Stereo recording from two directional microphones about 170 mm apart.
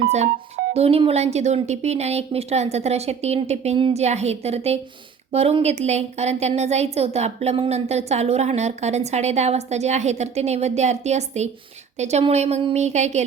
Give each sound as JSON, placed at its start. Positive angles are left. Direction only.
{"t": 0.1, "sound": "speech", "side_deg": -40}